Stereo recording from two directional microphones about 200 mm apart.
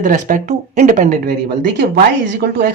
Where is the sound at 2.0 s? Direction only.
50° right (ahead or behind).